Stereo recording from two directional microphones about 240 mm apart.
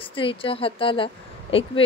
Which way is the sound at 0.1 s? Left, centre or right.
Left.